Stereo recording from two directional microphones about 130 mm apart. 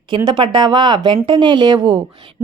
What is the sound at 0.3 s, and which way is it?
Speech, 40° right (ahead or behind).